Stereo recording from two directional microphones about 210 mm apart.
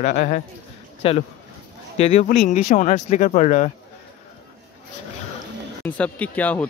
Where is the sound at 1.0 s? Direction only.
30° left (ahead or behind).